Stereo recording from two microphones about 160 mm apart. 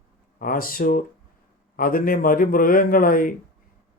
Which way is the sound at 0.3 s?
60° left (ahead or behind).